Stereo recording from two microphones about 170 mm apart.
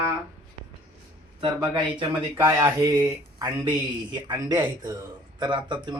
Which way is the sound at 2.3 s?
15° right (ahead or behind).